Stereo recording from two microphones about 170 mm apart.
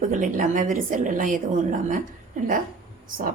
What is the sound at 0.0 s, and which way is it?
A woman's voice, 50° right (ahead or behind).